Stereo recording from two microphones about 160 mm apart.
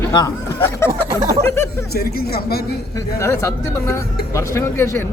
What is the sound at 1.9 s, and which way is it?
Speech, 75° left (ahead or behind).